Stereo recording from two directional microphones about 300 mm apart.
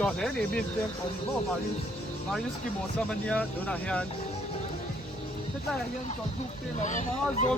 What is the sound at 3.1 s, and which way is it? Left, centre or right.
Speech, centre.